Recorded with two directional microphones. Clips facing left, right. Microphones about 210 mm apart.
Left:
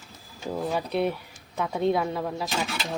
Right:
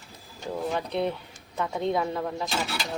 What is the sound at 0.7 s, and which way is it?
Speech, 10° left (ahead or behind).